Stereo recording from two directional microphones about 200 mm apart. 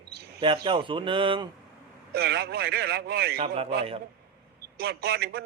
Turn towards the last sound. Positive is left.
turn(degrees=-55)  # may be behind; listen again after turning